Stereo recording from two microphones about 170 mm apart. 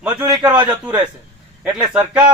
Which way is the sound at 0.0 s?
10° right (ahead or behind).